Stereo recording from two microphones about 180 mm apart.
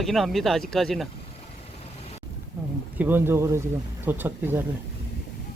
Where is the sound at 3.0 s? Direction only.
10° right (ahead or behind).